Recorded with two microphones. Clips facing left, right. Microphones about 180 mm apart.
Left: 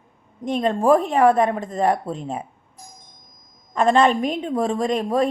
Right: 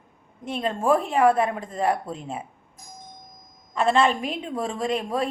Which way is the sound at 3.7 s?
40° left (ahead or behind).